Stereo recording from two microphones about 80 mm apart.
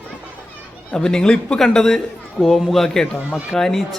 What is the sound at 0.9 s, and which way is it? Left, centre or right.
A man's voice, centre.